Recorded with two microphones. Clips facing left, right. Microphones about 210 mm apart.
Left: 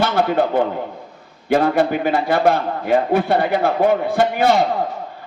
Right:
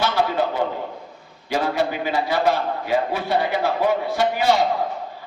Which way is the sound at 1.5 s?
55° left (ahead or behind).